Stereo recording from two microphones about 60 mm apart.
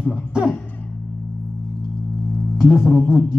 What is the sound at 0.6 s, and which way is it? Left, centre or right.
Music, left.